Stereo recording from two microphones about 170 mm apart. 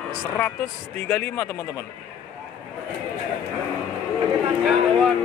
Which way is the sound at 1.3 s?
15° left (ahead or behind).